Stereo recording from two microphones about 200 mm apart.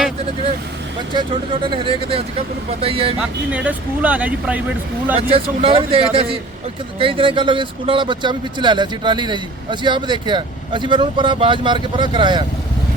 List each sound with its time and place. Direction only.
1.6 s speech: 25° right (ahead or behind)
3.2 s speech: 5° right (ahead or behind)
5.3 s speech: 30° right (ahead or behind)